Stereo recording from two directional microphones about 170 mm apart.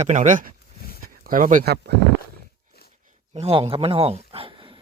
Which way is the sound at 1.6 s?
70° right (ahead or behind).